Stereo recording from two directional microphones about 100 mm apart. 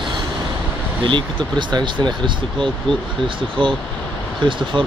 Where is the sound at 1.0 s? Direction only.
50° right (ahead or behind).